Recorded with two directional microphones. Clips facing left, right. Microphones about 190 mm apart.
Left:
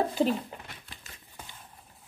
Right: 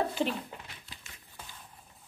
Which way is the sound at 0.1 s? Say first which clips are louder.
Left 5 dB; 40° left (ahead or behind).